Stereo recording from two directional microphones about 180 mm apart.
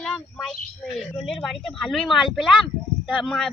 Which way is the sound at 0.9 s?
Centre (ahead or behind).